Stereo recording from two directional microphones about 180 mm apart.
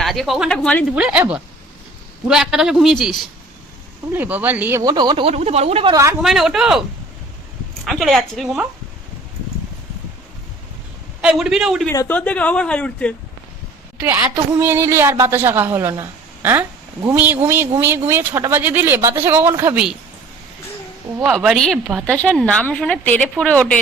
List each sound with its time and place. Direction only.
0.0 s a woman's voice: centre (ahead or behind)
0.9 s a woman's voice: 5° right (ahead or behind)
2.2 s a woman's voice: 5° right (ahead or behind); by 5.9 s 35° right (ahead or behind)
5.9 s a woman's voice: 15° right (ahead or behind)
6.2 s a woman's voice: centre (ahead or behind)
7.9 s a woman's voice: centre (ahead or behind)
11.2 s a woman's voice: 5° right (ahead or behind)
11.9 s speech: 10° left (ahead or behind)
14.0 s a woman's voice: 15° right (ahead or behind)
21.2 s a woman's voice: centre (ahead or behind)